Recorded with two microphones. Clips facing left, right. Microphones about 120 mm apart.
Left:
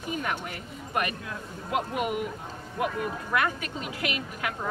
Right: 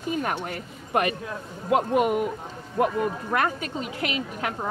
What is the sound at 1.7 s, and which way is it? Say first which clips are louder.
Speech: right 7 dB; 45° right (ahead or behind).